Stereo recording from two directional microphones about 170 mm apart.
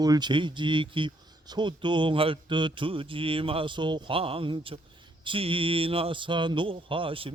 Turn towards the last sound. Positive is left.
turn(degrees=-30)  # may be behind; listen again after turning